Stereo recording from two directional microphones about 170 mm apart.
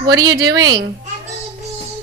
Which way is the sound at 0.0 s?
25° right (ahead or behind).